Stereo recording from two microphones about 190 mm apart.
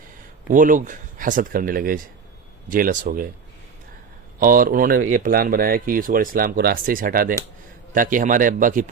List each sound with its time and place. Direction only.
0.5 s speech: 45° right (ahead or behind)
4.4 s speech: 45° right (ahead or behind)